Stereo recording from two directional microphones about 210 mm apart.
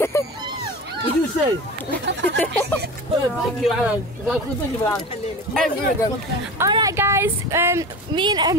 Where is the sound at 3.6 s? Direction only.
5° right (ahead or behind).